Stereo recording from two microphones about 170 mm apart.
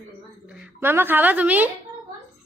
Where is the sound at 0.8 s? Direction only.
15° right (ahead or behind).